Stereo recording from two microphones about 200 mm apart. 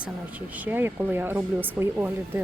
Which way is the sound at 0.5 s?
10° right (ahead or behind).